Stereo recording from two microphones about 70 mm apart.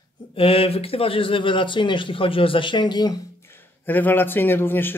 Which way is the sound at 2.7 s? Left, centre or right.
Left.